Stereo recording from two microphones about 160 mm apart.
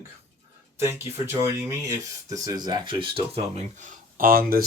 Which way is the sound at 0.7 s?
15° right (ahead or behind).